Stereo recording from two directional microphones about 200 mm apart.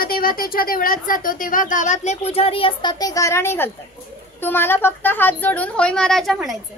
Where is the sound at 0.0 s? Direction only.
45° left (ahead or behind); by 6.6 s centre (ahead or behind).